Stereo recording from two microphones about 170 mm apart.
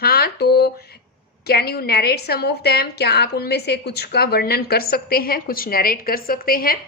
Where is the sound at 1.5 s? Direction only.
70° left (ahead or behind).